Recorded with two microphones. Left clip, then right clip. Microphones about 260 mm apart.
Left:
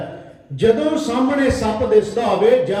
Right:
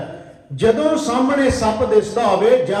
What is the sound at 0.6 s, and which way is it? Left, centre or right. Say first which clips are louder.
A man's voice: right 1 dB; right.